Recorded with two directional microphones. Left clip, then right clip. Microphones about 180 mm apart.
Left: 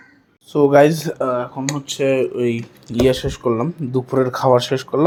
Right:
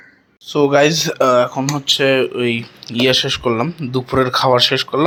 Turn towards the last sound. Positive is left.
turn(degrees=20)  # may be behind; listen again after turning